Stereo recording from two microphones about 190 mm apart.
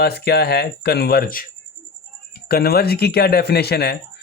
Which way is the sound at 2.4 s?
55° left (ahead or behind).